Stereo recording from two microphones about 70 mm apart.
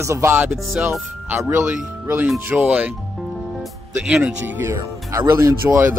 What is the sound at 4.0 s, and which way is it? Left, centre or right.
Speech, centre.